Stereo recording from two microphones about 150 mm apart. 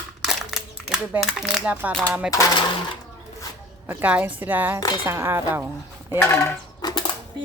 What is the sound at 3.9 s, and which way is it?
A woman's voice, 10° right (ahead or behind).